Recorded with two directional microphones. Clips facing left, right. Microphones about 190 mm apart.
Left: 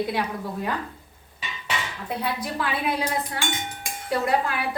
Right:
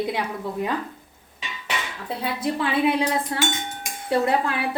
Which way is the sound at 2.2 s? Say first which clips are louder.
Right 4 dB; 25° right (ahead or behind).